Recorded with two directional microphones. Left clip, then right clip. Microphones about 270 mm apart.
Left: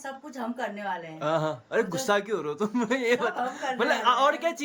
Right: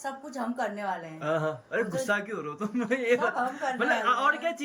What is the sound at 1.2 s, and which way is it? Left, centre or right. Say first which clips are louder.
Speech: left 2 dB; centre.